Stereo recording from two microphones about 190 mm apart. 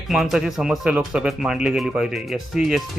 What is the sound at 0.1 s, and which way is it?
Speech, centre (ahead or behind).